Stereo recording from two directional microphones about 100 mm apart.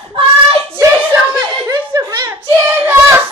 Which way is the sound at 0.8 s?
20° right (ahead or behind).